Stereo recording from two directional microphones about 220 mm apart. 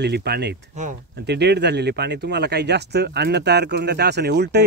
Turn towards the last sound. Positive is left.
turn(degrees=-50)  # may be behind; listen again after turning